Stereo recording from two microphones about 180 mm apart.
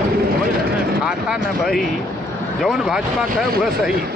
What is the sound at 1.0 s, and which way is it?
Speech, 5° right (ahead or behind).